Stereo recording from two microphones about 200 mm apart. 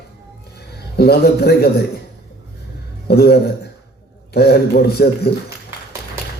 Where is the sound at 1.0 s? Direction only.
55° left (ahead or behind).